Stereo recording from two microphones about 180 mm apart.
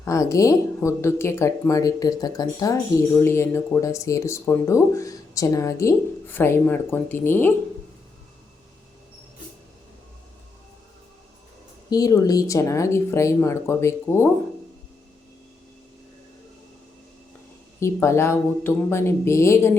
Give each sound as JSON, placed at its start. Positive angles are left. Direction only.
{"t": 0.0, "sound": "speech", "side_deg": 20}
{"t": 11.9, "sound": "speech", "side_deg": 20}
{"t": 17.7, "sound": "speech", "side_deg": 15}